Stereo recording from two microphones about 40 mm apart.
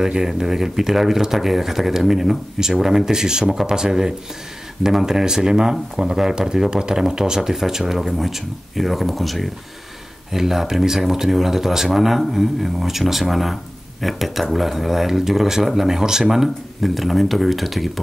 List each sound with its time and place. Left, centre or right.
0.0 s speech: centre
16.8 s speech: centre